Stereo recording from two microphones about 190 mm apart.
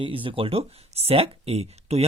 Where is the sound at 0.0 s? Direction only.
25° right (ahead or behind).